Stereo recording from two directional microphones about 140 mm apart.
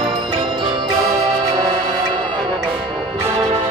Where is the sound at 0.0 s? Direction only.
40° right (ahead or behind).